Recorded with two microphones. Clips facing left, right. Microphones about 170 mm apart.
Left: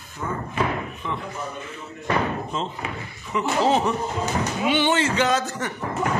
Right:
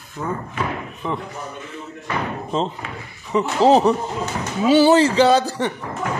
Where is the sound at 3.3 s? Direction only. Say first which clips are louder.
Right 6 dB; 35° right (ahead or behind).